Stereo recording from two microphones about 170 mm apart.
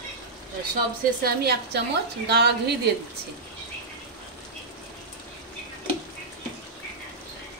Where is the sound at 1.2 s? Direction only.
70° right (ahead or behind).